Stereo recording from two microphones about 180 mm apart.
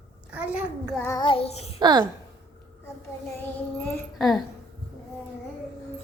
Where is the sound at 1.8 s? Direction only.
20° right (ahead or behind).